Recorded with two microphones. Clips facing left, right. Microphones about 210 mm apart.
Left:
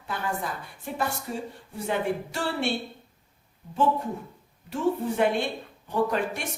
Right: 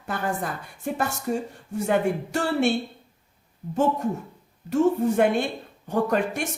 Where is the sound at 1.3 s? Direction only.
50° right (ahead or behind).